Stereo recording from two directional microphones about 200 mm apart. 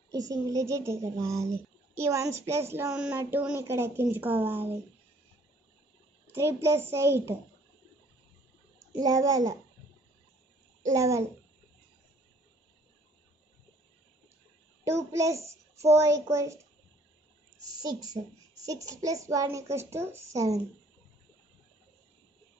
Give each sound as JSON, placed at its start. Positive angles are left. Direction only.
{"t": 0.3, "sound": "a woman's voice", "side_deg": -15}
{"t": 6.3, "sound": "a woman's voice", "side_deg": -15}
{"t": 8.9, "sound": "a woman's voice", "side_deg": -20}
{"t": 10.8, "sound": "a woman's voice", "side_deg": -15}
{"t": 15.0, "sound": "a woman's voice", "side_deg": -15}
{"t": 17.6, "sound": "a sound", "side_deg": -20}
{"t": 18.7, "sound": "a woman's voice", "side_deg": -15}